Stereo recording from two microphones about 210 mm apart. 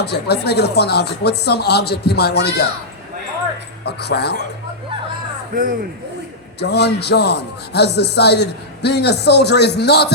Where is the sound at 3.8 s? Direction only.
50° left (ahead or behind).